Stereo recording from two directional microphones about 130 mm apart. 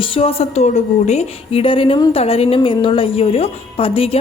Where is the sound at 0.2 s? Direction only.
50° left (ahead or behind).